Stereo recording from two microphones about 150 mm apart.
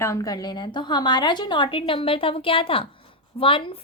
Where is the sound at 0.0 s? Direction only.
20° left (ahead or behind).